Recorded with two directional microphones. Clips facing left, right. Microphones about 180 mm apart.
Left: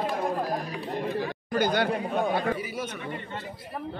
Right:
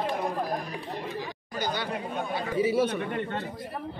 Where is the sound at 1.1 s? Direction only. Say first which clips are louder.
Left 7 dB; 55° left (ahead or behind).